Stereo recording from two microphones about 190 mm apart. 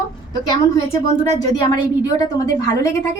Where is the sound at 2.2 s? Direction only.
20° left (ahead or behind).